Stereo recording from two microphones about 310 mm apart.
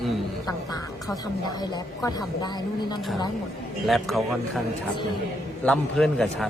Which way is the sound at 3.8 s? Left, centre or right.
Centre.